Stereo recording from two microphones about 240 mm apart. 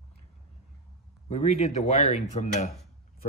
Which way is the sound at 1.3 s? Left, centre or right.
Left.